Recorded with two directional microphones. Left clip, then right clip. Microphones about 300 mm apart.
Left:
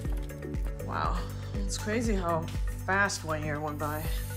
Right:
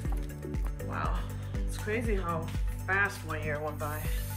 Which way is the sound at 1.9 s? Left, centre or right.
Centre.